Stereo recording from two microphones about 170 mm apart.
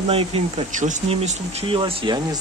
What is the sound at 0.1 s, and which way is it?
Speech, 35° right (ahead or behind).